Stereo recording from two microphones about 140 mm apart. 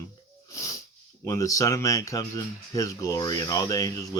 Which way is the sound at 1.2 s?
25° left (ahead or behind).